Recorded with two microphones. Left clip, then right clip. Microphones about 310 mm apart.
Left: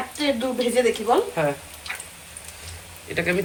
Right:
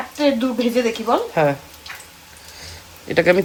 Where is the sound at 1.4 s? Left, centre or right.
Centre.